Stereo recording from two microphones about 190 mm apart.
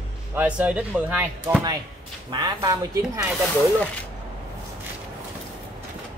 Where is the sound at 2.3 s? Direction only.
20° right (ahead or behind).